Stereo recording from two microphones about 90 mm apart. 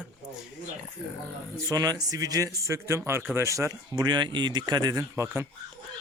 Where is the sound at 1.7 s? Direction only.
45° right (ahead or behind).